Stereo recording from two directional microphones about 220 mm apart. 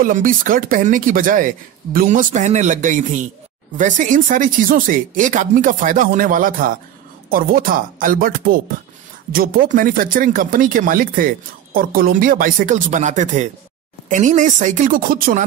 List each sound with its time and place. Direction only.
0.0 s speech: 40° right (ahead or behind)